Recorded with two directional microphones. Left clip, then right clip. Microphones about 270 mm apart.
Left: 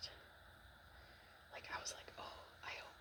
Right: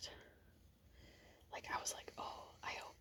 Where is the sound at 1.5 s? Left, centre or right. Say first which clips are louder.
Right 4 dB; right.